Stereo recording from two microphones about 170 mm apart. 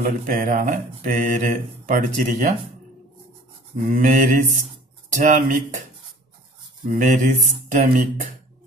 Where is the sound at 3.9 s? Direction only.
50° right (ahead or behind).